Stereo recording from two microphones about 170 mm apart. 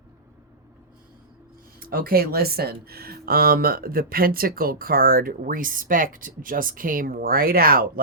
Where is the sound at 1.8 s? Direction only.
60° right (ahead or behind).